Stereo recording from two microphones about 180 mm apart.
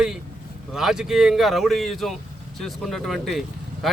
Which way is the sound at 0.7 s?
5° right (ahead or behind).